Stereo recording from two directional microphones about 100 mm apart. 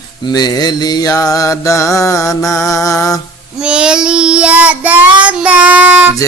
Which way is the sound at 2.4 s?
5° left (ahead or behind).